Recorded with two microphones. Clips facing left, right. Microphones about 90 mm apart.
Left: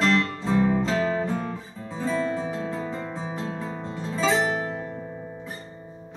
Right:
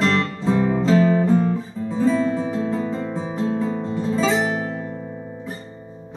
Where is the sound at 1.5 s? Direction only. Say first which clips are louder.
Right 10 dB; centre (ahead or behind).